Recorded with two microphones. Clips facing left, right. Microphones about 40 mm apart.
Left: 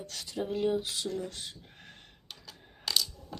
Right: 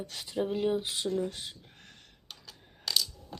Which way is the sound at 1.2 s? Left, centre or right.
Centre.